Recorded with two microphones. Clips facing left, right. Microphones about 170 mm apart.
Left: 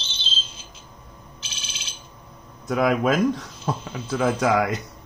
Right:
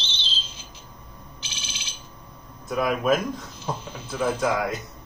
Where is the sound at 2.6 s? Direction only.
80° left.